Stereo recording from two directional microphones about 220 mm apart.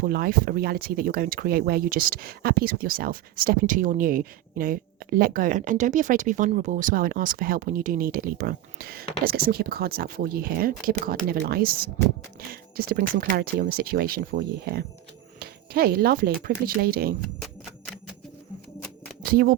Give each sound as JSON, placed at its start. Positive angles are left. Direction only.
{"t": 0.0, "sound": "speech", "side_deg": -45}
{"t": 19.2, "sound": "speech", "side_deg": -40}